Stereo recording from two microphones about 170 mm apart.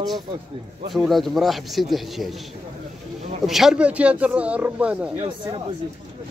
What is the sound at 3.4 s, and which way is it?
Speech, centre (ahead or behind).